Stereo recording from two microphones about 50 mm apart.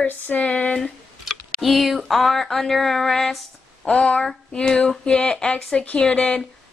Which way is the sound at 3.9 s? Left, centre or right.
Left.